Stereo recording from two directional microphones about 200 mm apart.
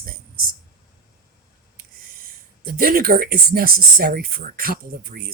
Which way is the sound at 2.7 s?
45° right (ahead or behind).